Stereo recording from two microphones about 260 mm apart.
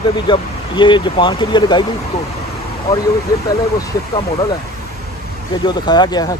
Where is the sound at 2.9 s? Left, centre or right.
Centre.